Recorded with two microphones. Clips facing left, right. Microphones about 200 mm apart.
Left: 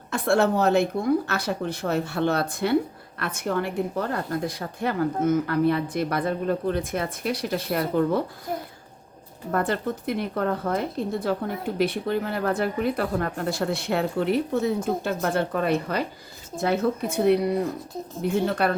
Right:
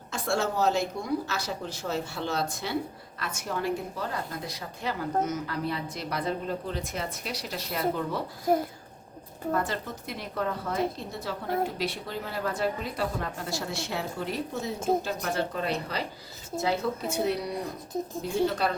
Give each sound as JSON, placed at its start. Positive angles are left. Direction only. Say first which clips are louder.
{"t": 0.1, "sound": "speech", "louder": "left 7 dB", "side_deg": 60}
{"t": 9.5, "sound": "speech", "louder": "left 5 dB", "side_deg": 60}